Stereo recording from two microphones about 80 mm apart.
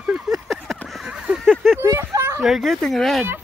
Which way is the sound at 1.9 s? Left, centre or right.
Right.